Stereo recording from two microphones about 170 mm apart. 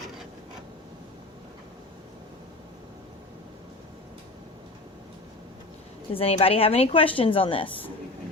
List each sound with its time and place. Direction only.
6.1 s a woman's voice: 35° left (ahead or behind)